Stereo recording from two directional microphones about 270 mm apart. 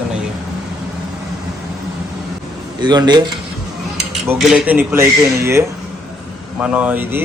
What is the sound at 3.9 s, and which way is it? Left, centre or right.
Speech, centre.